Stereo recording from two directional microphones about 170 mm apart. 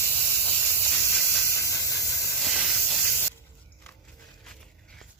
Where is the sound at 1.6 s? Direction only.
20° left (ahead or behind).